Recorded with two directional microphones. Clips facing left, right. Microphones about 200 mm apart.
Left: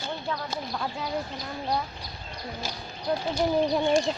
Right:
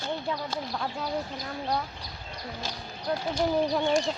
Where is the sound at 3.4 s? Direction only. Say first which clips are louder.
Left 1 dB; 5° left (ahead or behind).